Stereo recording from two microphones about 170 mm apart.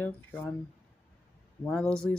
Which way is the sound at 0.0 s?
10° left (ahead or behind).